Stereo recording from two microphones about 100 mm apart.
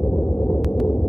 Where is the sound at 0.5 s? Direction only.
Centre (ahead or behind).